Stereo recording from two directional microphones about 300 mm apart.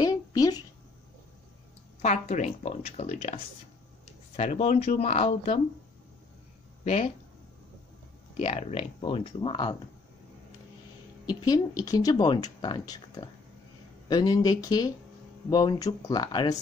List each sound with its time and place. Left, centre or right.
0.0 s a sound: centre
2.0 s speech: left
4.4 s speech: left
6.8 s speech: left
8.4 s speech: left
11.2 s speech: centre